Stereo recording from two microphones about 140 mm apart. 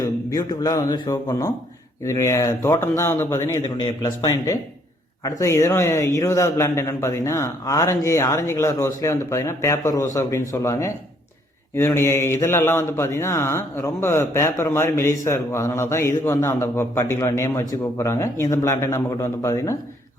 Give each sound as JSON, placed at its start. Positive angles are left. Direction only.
{"t": 0.0, "sound": "speech", "side_deg": 25}